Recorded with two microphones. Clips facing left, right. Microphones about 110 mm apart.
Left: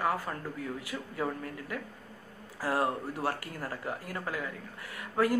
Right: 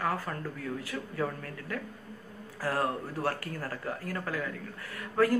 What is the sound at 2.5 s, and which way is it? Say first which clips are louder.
Speech: left 1 dB; 20° left (ahead or behind).